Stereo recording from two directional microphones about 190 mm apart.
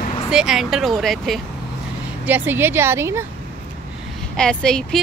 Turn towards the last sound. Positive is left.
turn(degrees=5)  # may be behind; listen again after turning